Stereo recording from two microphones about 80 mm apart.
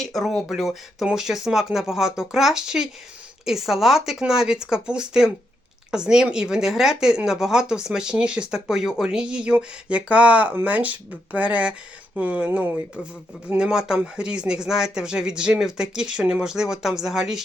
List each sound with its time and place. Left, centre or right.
0.0 s speech: centre